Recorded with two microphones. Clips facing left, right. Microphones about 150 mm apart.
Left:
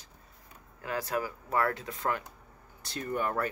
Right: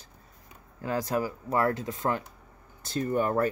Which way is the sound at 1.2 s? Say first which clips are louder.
Right 2 dB; 30° right (ahead or behind).